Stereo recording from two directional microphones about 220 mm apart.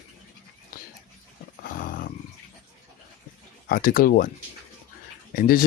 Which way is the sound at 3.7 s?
40° left (ahead or behind).